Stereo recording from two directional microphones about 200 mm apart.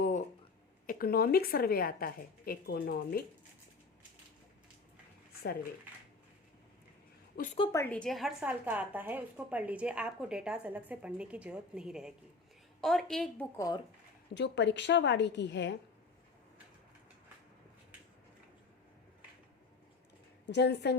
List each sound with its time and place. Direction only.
0.0 s a sound: 40° left (ahead or behind)
0.9 s speech: 50° left (ahead or behind)
7.3 s speech: 45° left (ahead or behind)
7.7 s a woman's voice: 10° left (ahead or behind)
13.6 s speech: 20° left (ahead or behind)
14.3 s a woman's voice: 60° left (ahead or behind)
20.5 s a woman's voice: 60° left (ahead or behind)